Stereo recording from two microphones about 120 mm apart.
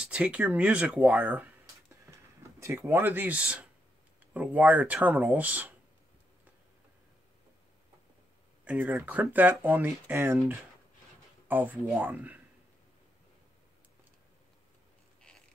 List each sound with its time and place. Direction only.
0.0 s speech: 10° right (ahead or behind)
2.6 s speech: 20° right (ahead or behind)
8.6 s speech: 15° right (ahead or behind)